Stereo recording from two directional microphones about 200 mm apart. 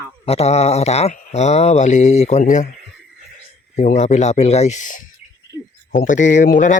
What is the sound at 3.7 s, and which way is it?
Speech, 35° left (ahead or behind).